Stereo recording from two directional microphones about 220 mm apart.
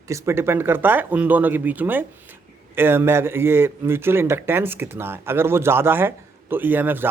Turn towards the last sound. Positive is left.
turn(degrees=-10)  # may be behind; listen again after turning